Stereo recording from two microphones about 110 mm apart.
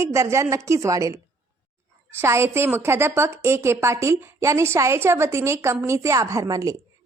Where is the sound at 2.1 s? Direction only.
25° right (ahead or behind).